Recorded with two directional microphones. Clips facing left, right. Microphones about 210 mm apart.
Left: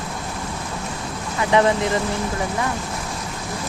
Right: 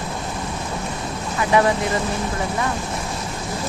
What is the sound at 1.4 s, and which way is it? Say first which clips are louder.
Speech: left 1 dB; 25° left (ahead or behind).